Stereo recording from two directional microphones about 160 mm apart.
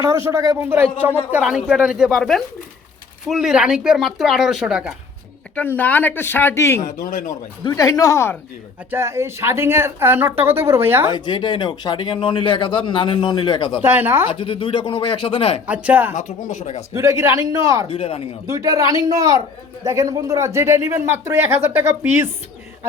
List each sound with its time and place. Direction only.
0.3 s speech: 20° right (ahead or behind)
5.5 s a man's voice: 10° left (ahead or behind)
8.9 s speech: 15° right (ahead or behind)
11.1 s a man's voice: 30° left (ahead or behind)
13.8 s speech: 15° right (ahead or behind)
14.3 s speech: 35° left (ahead or behind)
15.6 s speech: 10° right (ahead or behind)
16.1 s speech: 50° left (ahead or behind)
16.9 s speech: 20° right (ahead or behind)
17.8 s speech: 35° left (ahead or behind)
18.5 s speech: 20° right (ahead or behind)